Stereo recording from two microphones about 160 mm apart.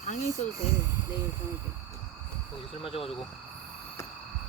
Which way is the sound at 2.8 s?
35° left (ahead or behind).